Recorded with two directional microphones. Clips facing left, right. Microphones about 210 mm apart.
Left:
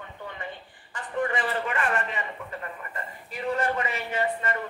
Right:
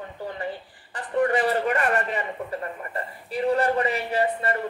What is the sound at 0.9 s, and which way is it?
A man's voice, 40° right (ahead or behind).